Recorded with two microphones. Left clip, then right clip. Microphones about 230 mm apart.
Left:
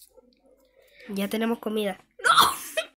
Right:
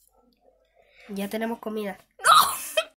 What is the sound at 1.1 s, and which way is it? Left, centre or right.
Speech, centre.